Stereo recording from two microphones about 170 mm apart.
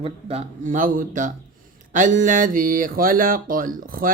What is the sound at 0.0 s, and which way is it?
Speech, 40° right (ahead or behind).